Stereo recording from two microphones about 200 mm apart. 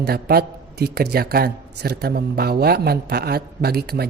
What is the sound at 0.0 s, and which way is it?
A man's voice, 50° right (ahead or behind).